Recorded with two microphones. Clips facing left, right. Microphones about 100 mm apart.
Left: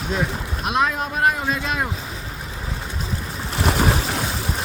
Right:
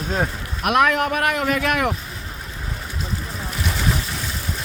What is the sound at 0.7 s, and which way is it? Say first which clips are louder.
Speech: right 4 dB; 65° right (ahead or behind).